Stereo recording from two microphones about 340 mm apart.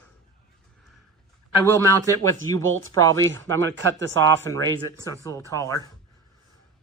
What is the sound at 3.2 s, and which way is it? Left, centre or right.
Speech, right.